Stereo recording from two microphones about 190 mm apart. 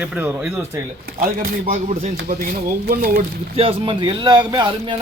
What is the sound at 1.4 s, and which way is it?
Speech, 45° right (ahead or behind).